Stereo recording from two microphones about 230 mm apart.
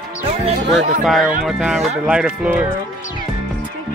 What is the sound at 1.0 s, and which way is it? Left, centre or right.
Speech, centre.